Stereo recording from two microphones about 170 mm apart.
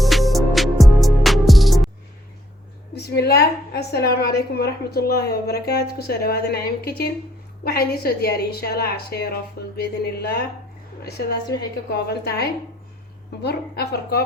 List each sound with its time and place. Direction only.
0.0 s music: centre (ahead or behind)
2.9 s a woman's voice: 70° left (ahead or behind)
11.9 s a woman's voice: 70° left (ahead or behind)